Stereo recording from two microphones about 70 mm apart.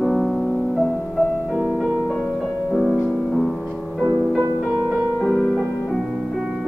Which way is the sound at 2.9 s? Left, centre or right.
Centre.